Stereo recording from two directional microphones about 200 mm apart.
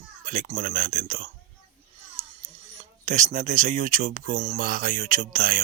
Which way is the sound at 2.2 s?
35° right (ahead or behind).